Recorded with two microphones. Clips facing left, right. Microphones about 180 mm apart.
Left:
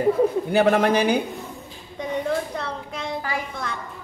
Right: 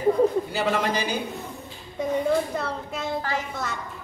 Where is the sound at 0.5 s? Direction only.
60° left (ahead or behind).